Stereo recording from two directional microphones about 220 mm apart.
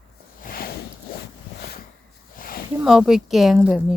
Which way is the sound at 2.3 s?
40° left (ahead or behind).